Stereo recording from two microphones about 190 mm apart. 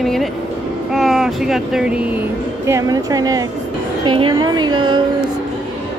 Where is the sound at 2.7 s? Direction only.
20° right (ahead or behind).